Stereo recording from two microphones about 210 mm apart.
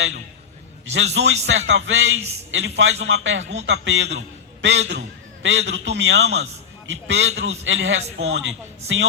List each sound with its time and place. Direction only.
0.9 s a man's voice: 65° right (ahead or behind)